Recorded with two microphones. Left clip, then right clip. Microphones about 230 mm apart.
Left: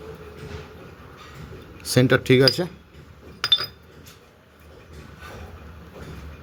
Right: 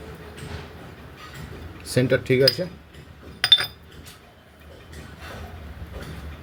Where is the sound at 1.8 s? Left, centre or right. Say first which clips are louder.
Left 2 dB; left.